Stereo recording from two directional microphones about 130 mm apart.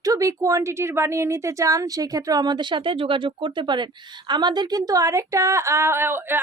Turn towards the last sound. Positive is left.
turn(degrees=-15)  # may be behind; listen again after turning